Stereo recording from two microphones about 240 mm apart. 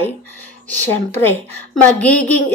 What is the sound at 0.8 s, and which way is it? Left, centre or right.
A woman's voice, centre.